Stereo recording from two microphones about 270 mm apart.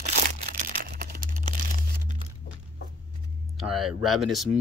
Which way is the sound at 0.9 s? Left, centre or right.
Right.